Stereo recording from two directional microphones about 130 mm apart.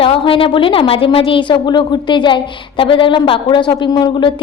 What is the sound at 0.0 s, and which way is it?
A woman's voice, 45° left (ahead or behind).